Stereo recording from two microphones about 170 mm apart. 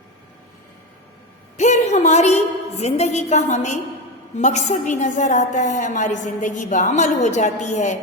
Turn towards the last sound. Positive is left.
turn(degrees=45)  # may be behind; listen again after turning